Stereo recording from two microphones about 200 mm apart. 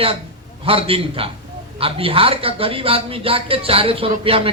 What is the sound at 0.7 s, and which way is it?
A man's voice, 30° right (ahead or behind).